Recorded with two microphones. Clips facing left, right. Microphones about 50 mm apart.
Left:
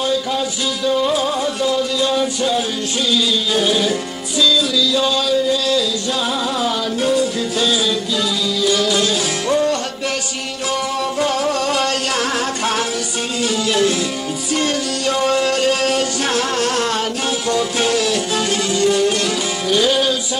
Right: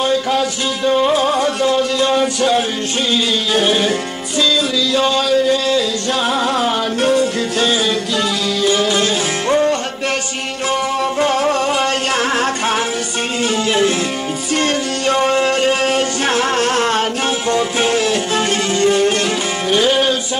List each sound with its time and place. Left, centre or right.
0.0 s music: right
14.6 s music: right